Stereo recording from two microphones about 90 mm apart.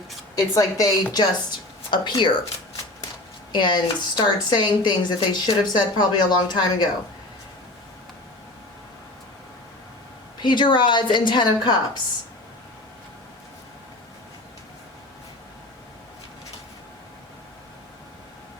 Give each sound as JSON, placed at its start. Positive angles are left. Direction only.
{"t": 0.3, "sound": "a woman's voice", "side_deg": 40}
{"t": 3.5, "sound": "speech", "side_deg": 55}
{"t": 10.4, "sound": "speech", "side_deg": 60}